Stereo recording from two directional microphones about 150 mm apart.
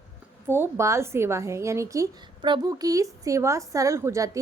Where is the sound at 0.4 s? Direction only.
15° right (ahead or behind).